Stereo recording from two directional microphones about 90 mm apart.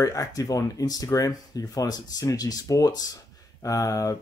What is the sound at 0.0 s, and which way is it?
Speech, 35° left (ahead or behind).